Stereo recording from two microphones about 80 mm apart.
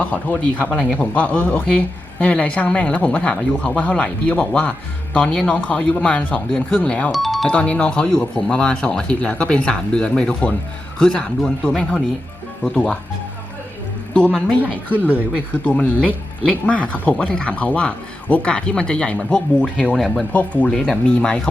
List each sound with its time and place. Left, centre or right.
0.0 s speech: centre
7.1 s speech: centre
7.4 s speech: centre
15.5 s speech: centre
20.3 s speech: centre